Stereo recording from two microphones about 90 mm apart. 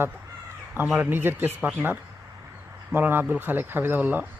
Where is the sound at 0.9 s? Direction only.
25° right (ahead or behind).